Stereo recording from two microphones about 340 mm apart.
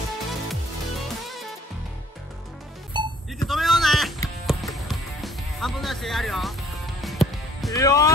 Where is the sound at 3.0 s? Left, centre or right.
Centre.